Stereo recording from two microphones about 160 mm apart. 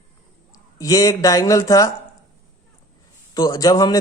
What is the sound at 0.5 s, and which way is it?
Speech, 20° left (ahead or behind).